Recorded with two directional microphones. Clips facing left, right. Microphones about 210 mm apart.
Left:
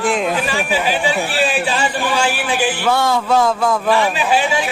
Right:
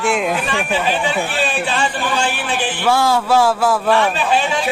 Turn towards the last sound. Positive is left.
turn(degrees=10)  # may be behind; listen again after turning